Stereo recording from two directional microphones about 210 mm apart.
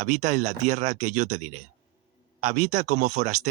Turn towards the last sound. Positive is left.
turn(degrees=-35)  # may be behind; listen again after turning